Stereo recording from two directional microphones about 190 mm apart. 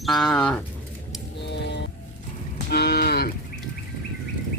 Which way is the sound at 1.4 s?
65° left (ahead or behind).